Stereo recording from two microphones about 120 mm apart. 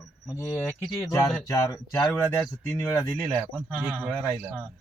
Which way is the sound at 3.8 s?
10° right (ahead or behind).